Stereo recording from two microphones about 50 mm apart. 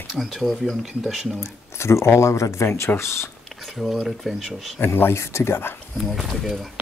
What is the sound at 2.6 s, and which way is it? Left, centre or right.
Speech, left.